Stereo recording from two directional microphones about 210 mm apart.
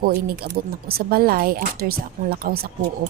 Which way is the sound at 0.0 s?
45° right (ahead or behind).